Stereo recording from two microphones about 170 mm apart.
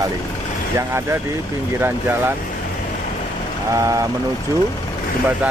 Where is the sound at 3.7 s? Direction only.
20° right (ahead or behind).